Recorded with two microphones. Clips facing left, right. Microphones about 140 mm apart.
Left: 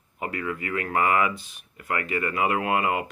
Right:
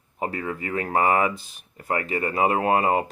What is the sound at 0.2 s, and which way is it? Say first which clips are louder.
Speech: right 2 dB; 35° right (ahead or behind).